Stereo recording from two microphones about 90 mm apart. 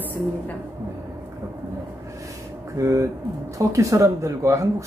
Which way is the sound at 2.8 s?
35° right (ahead or behind).